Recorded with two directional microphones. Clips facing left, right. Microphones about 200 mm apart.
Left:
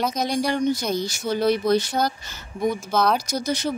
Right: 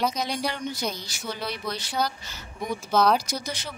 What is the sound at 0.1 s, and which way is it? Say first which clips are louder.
Speech: left 6 dB; 45° left (ahead or behind).